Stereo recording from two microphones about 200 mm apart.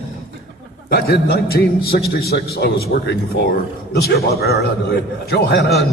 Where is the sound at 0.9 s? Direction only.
55° left (ahead or behind).